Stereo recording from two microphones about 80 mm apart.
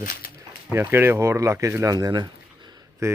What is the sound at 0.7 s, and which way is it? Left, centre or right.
Speech, right.